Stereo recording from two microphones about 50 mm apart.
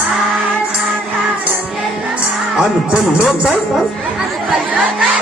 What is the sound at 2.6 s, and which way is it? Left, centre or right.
Speech, centre.